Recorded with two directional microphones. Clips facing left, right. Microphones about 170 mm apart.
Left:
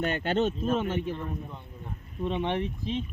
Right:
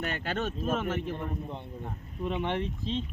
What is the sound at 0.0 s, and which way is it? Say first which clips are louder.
Speech: left 6 dB; 30° left (ahead or behind).